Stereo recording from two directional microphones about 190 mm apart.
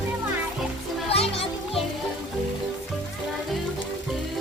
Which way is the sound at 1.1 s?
30° left (ahead or behind).